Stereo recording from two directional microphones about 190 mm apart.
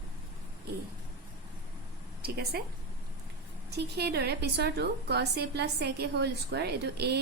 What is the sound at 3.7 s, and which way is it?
A woman's voice, 60° right (ahead or behind).